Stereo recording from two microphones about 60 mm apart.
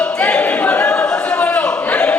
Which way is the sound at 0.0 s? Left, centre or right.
Left.